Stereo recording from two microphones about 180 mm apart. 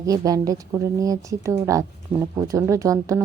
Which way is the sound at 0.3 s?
20° right (ahead or behind).